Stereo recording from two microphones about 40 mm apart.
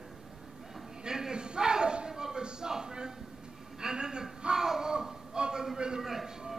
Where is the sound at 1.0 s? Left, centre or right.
Centre.